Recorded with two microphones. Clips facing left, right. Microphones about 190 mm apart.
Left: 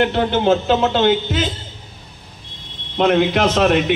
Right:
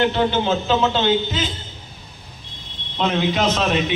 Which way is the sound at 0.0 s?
55° left (ahead or behind).